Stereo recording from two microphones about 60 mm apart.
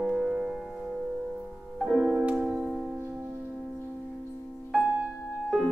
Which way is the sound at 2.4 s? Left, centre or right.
Centre.